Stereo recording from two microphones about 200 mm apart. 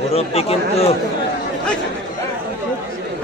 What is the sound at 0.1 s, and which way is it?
Speech, 30° left (ahead or behind).